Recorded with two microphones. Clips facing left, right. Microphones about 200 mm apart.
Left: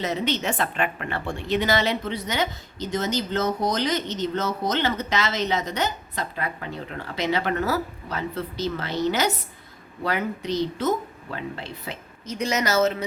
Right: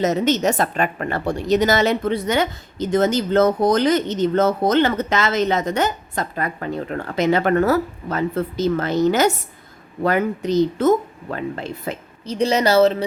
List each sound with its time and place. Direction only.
0.0 s a woman's voice: 45° right (ahead or behind)
12.2 s speech: 30° right (ahead or behind)